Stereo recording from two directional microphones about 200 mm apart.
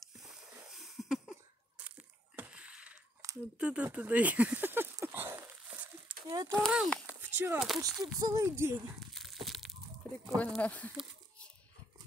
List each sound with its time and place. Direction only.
0.2 s a sound: centre (ahead or behind)
6.2 s speech: 20° right (ahead or behind)
6.5 s speech: centre (ahead or behind)
7.2 s speech: 10° right (ahead or behind)
9.1 s a sound: centre (ahead or behind)
10.4 s speech: 5° left (ahead or behind)